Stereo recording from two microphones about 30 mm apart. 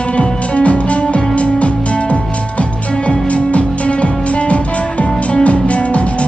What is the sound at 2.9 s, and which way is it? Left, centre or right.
Music, left.